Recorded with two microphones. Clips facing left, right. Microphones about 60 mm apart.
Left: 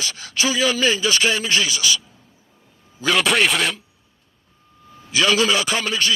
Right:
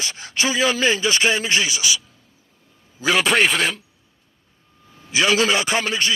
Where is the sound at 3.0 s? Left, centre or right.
Centre.